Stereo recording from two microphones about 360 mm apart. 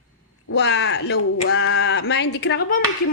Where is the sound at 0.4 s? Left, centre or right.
Left.